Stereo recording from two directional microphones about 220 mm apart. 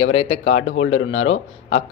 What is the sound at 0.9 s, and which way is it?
Speech, 65° left (ahead or behind).